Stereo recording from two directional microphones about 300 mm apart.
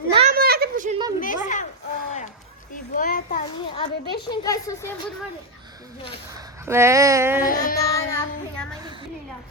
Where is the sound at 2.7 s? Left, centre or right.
Left; by 4.9 s centre.